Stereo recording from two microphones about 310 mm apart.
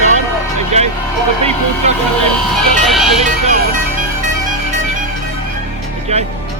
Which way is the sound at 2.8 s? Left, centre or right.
Centre.